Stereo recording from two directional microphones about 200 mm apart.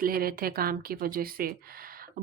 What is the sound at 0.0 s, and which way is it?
Speech, 50° right (ahead or behind).